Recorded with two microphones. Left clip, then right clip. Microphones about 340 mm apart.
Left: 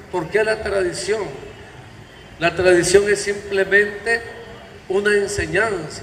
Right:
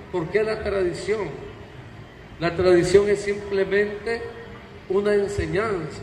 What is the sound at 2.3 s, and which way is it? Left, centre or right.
A man's voice, left.